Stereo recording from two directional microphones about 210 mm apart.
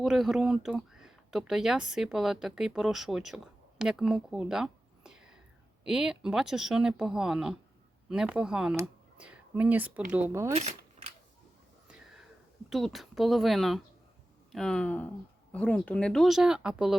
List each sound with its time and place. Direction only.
0.0 s speech: centre (ahead or behind)
10.5 s a sound: 30° right (ahead or behind)
12.7 s speech: centre (ahead or behind)